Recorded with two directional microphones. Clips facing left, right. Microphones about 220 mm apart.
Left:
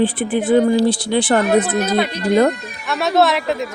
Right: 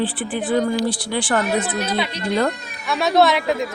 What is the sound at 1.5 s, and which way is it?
Speech, 55° left (ahead or behind).